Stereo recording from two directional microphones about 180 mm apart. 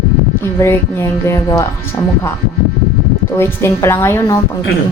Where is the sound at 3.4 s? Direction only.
15° left (ahead or behind).